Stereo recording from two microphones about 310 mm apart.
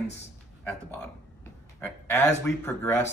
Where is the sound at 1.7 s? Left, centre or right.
Centre.